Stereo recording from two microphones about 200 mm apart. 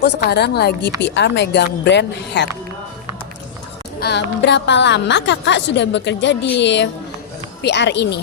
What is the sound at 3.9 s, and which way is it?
Speech, 55° left (ahead or behind).